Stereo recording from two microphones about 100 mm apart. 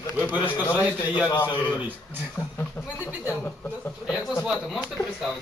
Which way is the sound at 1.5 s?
15° left (ahead or behind).